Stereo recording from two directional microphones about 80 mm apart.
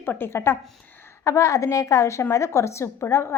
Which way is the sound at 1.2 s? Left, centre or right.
Left.